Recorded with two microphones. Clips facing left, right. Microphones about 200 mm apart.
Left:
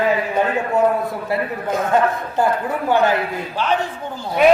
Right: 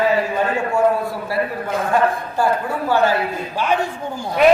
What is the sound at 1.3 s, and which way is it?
A woman's voice, 20° left (ahead or behind).